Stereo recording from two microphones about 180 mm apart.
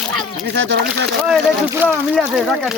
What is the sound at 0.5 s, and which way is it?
Speech, 70° right (ahead or behind).